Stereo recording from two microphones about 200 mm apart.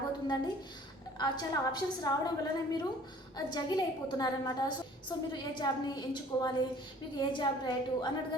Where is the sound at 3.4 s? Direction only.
20° left (ahead or behind).